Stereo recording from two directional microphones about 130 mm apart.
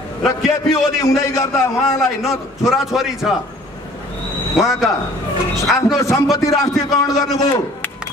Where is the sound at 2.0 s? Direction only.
Centre (ahead or behind).